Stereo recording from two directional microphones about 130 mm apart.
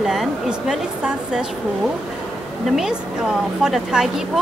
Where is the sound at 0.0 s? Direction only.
5° right (ahead or behind).